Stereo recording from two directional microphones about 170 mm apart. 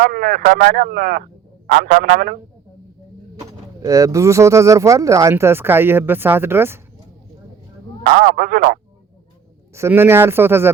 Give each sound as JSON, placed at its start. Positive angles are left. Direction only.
{"t": 0.0, "sound": "speech", "side_deg": -55}
{"t": 3.8, "sound": "speech", "side_deg": -20}
{"t": 8.0, "sound": "speech", "side_deg": -55}
{"t": 9.7, "sound": "speech", "side_deg": -15}